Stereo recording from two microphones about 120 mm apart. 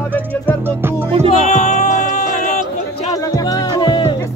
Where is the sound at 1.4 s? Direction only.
80° left.